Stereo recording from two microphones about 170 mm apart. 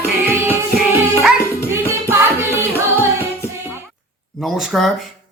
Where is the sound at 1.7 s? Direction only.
15° right (ahead or behind).